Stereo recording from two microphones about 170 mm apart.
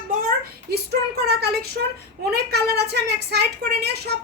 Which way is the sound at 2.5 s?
75° right (ahead or behind).